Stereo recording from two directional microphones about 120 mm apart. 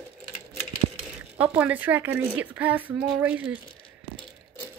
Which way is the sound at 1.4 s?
10° right (ahead or behind).